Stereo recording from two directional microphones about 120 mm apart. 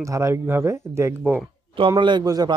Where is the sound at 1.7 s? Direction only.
45° right (ahead or behind).